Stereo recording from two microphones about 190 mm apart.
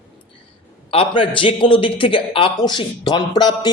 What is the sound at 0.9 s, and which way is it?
A man's voice, 30° left (ahead or behind).